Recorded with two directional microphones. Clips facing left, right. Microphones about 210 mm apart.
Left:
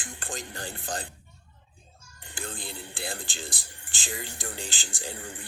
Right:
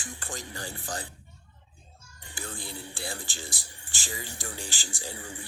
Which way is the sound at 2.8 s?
55° left (ahead or behind).